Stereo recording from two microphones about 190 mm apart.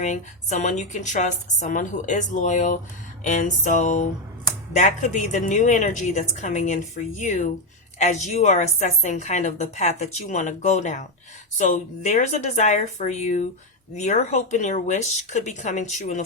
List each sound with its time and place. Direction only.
0.0 s a woman's voice: 40° left (ahead or behind)